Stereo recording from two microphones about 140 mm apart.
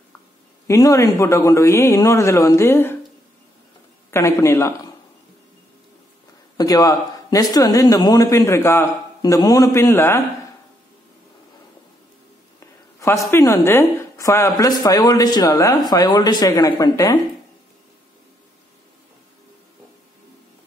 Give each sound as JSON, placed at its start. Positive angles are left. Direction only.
{"t": 0.7, "sound": "a man's voice", "side_deg": 25}
{"t": 4.1, "sound": "a man's voice", "side_deg": 20}
{"t": 6.5, "sound": "a man's voice", "side_deg": 25}
{"t": 13.3, "sound": "a man's voice", "side_deg": 20}